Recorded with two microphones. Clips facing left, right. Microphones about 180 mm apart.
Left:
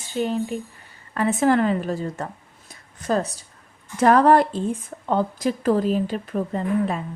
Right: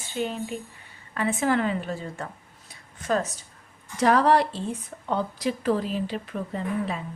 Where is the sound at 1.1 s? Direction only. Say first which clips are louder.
Left 5 dB; 40° left (ahead or behind).